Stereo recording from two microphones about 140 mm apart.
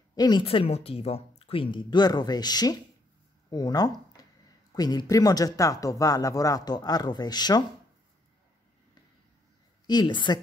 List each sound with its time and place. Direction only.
0.1 s speech: 30° left (ahead or behind)
4.2 s a sound: 25° left (ahead or behind)
4.7 s speech: 30° left (ahead or behind)
9.8 s speech: 30° left (ahead or behind)